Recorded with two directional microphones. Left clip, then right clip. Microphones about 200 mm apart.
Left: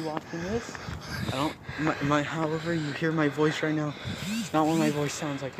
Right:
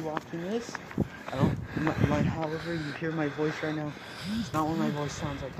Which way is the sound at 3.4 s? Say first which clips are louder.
Left 4 dB; 50° left (ahead or behind).